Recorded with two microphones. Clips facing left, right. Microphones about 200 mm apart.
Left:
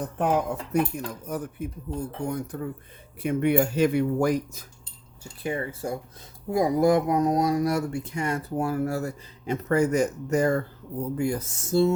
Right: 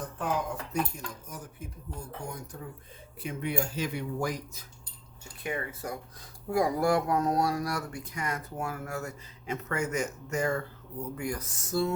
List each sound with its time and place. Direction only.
0.2 s speech: 60° left (ahead or behind)
5.4 s speech: 30° left (ahead or behind)